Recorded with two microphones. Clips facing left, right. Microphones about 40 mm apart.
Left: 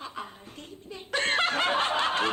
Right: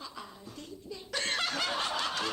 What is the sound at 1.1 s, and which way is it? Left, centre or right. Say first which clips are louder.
Snicker: left 7 dB; left.